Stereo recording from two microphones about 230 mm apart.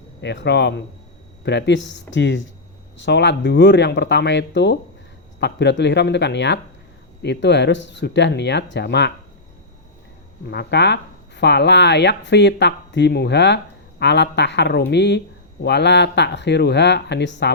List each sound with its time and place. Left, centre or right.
0.2 s speech: left
10.5 s speech: left